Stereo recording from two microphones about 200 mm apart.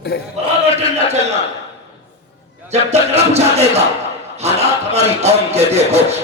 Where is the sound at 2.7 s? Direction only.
30° right (ahead or behind).